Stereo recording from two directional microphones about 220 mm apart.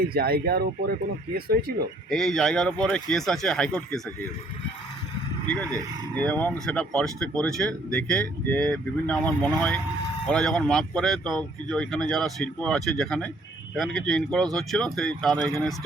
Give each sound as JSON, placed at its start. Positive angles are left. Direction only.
{"t": 0.1, "sound": "speech", "side_deg": -45}
{"t": 2.0, "sound": "speech", "side_deg": 0}
{"t": 6.1, "sound": "speech", "side_deg": 5}